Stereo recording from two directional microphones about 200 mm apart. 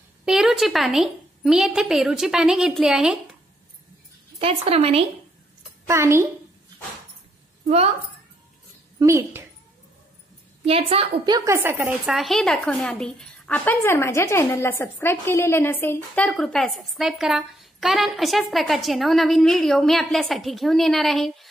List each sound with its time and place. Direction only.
0.2 s a woman's voice: centre (ahead or behind)
4.4 s a woman's voice: 30° right (ahead or behind)
5.9 s a woman's voice: 15° right (ahead or behind)
9.0 s a woman's voice: 15° right (ahead or behind)
10.6 s a woman's voice: 30° right (ahead or behind); by 21.5 s centre (ahead or behind)